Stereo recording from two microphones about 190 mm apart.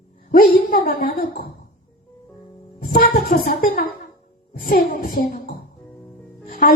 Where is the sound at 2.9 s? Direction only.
40° left (ahead or behind).